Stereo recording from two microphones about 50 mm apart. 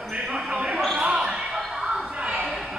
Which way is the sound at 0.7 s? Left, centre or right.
Centre.